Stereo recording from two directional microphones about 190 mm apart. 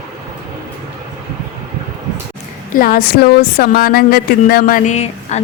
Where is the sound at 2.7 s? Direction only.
50° left (ahead or behind).